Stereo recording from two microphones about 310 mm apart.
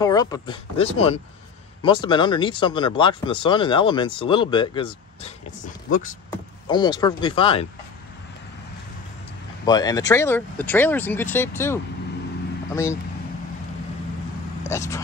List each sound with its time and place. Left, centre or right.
0.0 s speech: centre
9.7 s speech: centre
14.6 s speech: centre